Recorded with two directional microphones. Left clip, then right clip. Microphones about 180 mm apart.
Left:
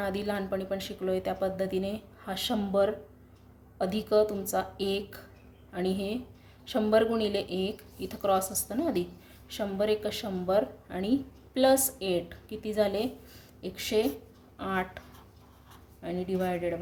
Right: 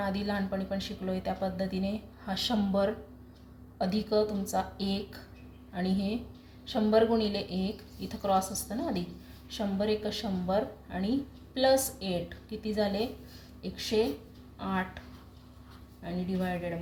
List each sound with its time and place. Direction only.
0.0 s a woman's voice: 50° left (ahead or behind)
16.0 s a woman's voice: 55° left (ahead or behind)